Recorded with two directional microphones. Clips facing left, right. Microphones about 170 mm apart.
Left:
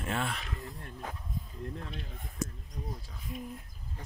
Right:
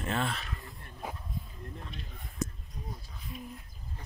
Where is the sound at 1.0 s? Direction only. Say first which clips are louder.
Right 3 dB; 10° right (ahead or behind).